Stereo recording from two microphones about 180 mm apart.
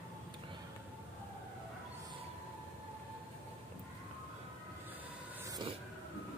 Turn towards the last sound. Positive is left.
turn(degrees=-20)  # may be behind; listen again after turning